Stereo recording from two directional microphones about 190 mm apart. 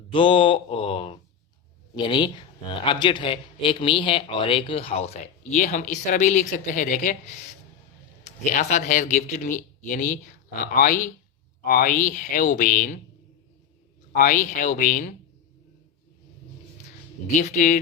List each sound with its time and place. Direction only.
0.1 s a sound: 25° left (ahead or behind)
2.0 s a man's voice: 25° left (ahead or behind); by 13.0 s 45° left (ahead or behind)
14.2 s speech: 45° left (ahead or behind)
17.4 s speech: 40° left (ahead or behind)